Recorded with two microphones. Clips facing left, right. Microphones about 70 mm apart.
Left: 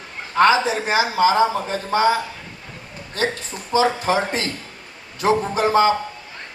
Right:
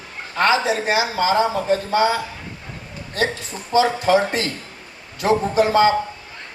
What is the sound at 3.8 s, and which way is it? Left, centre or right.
Speech, left.